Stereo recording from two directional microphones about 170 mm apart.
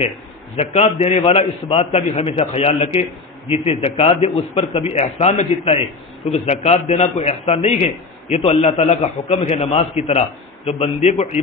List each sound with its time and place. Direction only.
0.6 s a man's voice: 35° left (ahead or behind)